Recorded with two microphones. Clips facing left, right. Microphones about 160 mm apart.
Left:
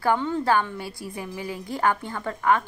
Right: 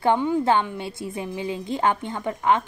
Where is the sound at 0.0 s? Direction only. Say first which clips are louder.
Right 3 dB; 20° right (ahead or behind).